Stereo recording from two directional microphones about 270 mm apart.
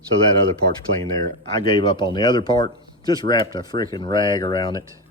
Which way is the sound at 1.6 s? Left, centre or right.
Centre.